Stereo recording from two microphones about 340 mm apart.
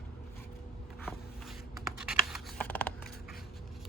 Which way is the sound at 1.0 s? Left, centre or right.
Centre.